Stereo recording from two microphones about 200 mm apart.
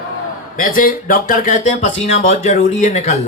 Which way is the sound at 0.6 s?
45° left (ahead or behind).